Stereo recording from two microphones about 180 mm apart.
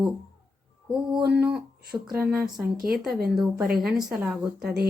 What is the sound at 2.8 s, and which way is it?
Speech, 55° right (ahead or behind).